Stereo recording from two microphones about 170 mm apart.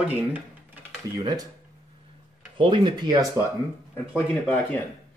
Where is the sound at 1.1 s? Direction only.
20° right (ahead or behind).